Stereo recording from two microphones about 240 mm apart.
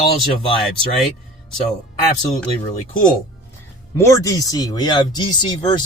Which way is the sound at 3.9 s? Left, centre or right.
Centre.